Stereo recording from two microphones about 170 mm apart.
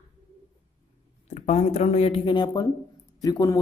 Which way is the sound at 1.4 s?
40° left (ahead or behind).